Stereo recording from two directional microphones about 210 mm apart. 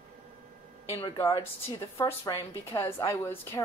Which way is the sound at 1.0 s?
15° left (ahead or behind).